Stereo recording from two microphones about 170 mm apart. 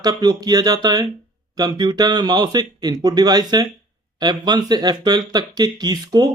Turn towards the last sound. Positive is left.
turn(degrees=-25)  # may be behind; listen again after turning